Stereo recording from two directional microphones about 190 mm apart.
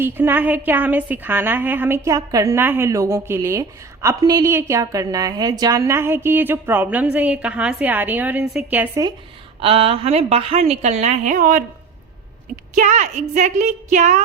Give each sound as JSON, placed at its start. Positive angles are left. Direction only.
{"t": 0.0, "sound": "a woman's voice", "side_deg": -10}
{"t": 9.6, "sound": "a woman's voice", "side_deg": -30}
{"t": 12.7, "sound": "a woman's voice", "side_deg": -40}